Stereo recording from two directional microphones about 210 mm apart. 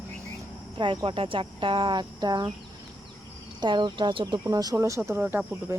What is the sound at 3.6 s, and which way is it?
Speech, 20° right (ahead or behind).